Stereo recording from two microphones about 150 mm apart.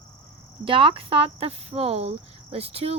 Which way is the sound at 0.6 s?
35° right (ahead or behind).